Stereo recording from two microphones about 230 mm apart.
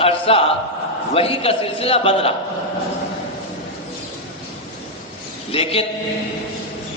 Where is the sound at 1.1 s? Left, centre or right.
Left.